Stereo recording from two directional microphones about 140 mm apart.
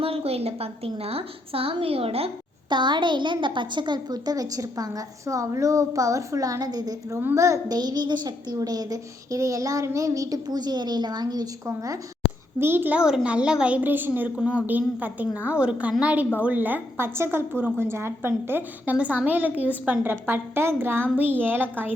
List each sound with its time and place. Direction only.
0.0 s a woman's voice: 45° right (ahead or behind); by 21.9 s 15° right (ahead or behind)